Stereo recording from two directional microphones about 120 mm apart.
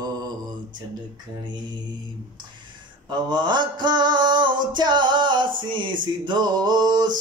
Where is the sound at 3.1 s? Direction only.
40° right (ahead or behind).